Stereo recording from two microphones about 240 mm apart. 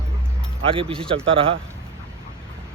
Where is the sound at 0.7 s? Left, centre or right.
Right.